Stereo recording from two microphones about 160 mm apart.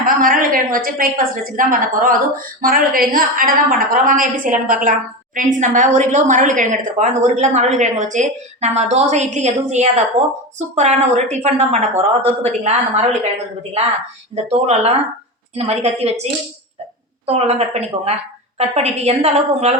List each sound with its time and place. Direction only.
0.2 s a woman's voice: 60° right (ahead or behind); by 13.1 s 45° right (ahead or behind)
14.4 s a woman's voice: 40° right (ahead or behind)